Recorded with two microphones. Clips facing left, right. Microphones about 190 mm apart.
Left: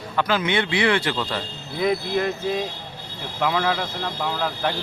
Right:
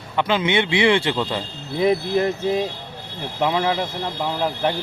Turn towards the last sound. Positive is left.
turn(degrees=-20)  # may be behind; listen again after turning